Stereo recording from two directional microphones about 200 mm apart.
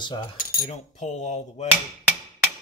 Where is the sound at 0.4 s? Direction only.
45° left (ahead or behind).